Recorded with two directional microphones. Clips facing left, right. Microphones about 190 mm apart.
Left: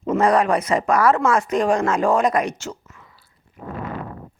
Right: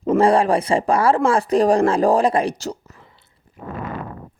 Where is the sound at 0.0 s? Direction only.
30° right (ahead or behind).